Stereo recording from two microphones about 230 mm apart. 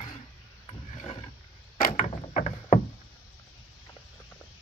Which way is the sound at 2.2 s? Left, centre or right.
Left.